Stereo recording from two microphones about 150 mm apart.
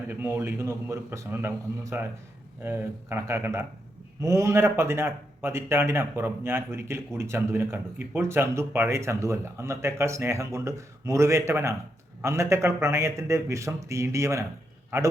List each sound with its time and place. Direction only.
0.1 s a man's voice: 15° right (ahead or behind)